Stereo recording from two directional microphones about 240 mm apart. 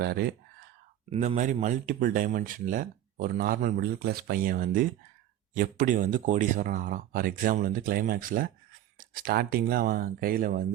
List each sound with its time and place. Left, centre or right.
0.0 s speech: right
1.1 s speech: right